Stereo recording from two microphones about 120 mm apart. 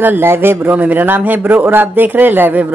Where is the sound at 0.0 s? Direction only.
20° right (ahead or behind).